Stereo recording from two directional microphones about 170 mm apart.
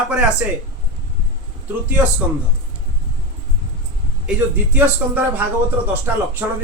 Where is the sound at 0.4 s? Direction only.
10° right (ahead or behind).